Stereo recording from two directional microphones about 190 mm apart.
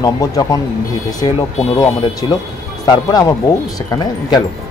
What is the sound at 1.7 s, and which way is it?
Speech, 15° left (ahead or behind).